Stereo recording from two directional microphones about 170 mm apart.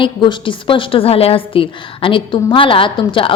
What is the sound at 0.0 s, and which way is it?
A woman's voice, 30° left (ahead or behind).